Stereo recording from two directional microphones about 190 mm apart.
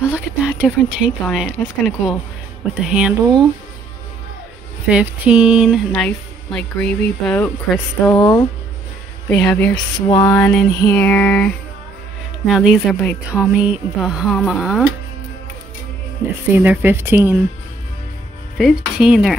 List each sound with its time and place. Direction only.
0.1 s speech: 5° right (ahead or behind)
4.8 s speech: 5° right (ahead or behind)
8.2 s speech: 20° left (ahead or behind)
9.3 s speech: 5° left (ahead or behind)
10.0 s a sound: 15° left (ahead or behind)
12.4 s speech: centre (ahead or behind)
16.5 s speech: 10° right (ahead or behind)
18.6 s speech: centre (ahead or behind)